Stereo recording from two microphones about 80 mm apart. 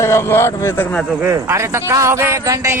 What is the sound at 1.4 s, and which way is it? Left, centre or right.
Speech, right.